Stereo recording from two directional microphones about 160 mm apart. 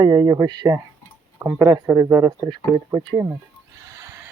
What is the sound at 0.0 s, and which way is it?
Speech, 25° right (ahead or behind).